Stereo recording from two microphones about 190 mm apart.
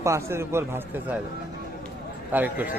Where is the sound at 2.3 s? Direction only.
10° right (ahead or behind).